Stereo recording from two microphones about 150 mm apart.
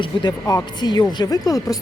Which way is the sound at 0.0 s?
30° left (ahead or behind).